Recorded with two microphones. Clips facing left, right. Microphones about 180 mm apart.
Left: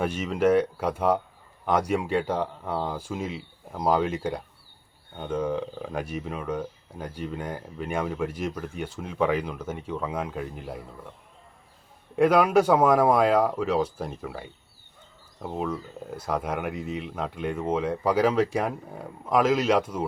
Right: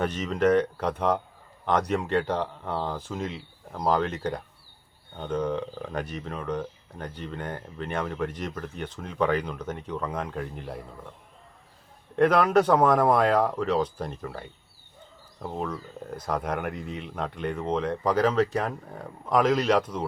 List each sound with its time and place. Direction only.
0.0 s speech: 10° left (ahead or behind)
12.1 s speech: 10° left (ahead or behind)